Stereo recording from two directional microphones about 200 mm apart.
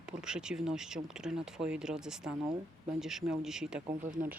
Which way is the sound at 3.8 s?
40° right (ahead or behind).